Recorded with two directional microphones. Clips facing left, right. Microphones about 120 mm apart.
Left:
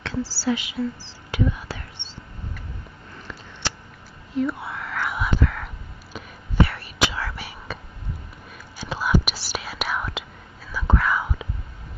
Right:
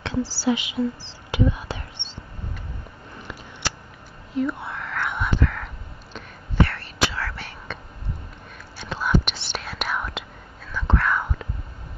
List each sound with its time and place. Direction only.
0.0 s speech: 20° right (ahead or behind)
4.3 s whispering: centre (ahead or behind)
6.7 s whispering: 10° left (ahead or behind)